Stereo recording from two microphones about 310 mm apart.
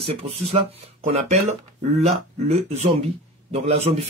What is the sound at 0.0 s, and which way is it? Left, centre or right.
Speech, centre.